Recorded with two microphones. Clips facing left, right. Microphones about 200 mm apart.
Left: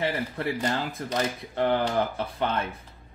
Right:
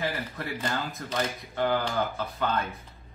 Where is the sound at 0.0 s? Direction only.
30° left (ahead or behind).